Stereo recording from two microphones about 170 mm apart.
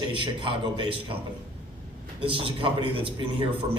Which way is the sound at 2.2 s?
30° right (ahead or behind).